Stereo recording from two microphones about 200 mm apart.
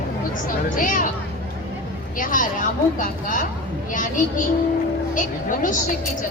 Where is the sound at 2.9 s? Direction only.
40° left (ahead or behind).